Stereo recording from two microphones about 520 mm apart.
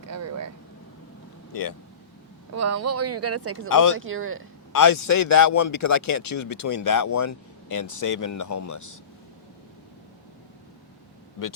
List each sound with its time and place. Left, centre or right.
0.0 s vehicle: right
2.6 s speech: right
3.7 s speech: left
3.9 s speech: right
4.7 s speech: left